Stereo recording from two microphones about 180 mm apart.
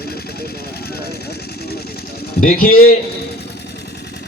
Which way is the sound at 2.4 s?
55° left (ahead or behind).